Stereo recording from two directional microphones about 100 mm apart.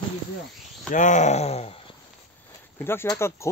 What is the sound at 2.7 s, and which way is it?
Speech, 25° left (ahead or behind).